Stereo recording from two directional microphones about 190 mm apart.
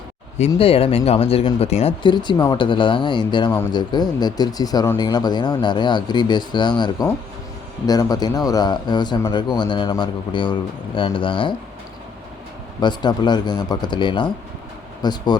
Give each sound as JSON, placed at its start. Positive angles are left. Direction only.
{"t": 0.3, "sound": "speech", "side_deg": 35}
{"t": 12.8, "sound": "speech", "side_deg": 25}